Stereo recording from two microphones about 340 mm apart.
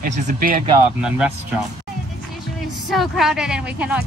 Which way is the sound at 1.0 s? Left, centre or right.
Centre.